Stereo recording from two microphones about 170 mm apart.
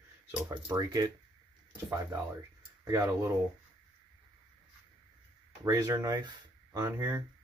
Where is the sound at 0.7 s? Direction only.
20° right (ahead or behind).